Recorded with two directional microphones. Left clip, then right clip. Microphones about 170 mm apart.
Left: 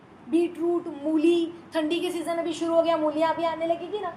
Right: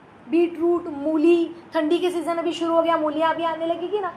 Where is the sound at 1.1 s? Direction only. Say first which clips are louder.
Right 4 dB; 20° right (ahead or behind).